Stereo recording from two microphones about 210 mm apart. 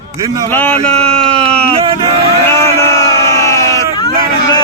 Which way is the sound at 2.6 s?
15° left (ahead or behind).